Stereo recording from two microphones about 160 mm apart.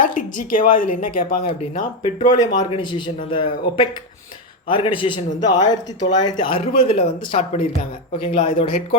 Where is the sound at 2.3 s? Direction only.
30° left (ahead or behind).